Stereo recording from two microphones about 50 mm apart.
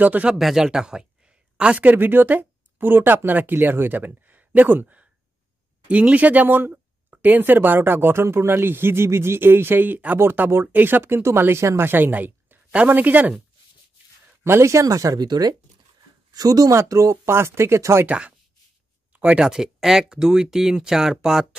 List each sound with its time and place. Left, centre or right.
0.0 s speech: right
0.4 s speech: centre
0.7 s a sound: centre
1.9 s speech: right
5.9 s speech: right
11.2 s speech: right
11.9 s a woman's voice: right
14.4 s speech: right
16.7 s speech: right
17.3 s speech: right
19.1 s a sound: right
19.4 s speech: centre